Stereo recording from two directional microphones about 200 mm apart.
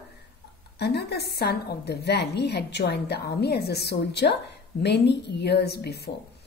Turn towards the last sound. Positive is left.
turn(degrees=55)  # may be behind; listen again after turning